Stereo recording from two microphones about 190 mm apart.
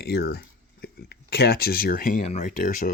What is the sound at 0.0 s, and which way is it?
Speech, 55° left (ahead or behind).